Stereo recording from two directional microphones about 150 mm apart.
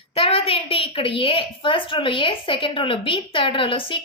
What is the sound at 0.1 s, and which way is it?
A woman's voice, 40° left (ahead or behind).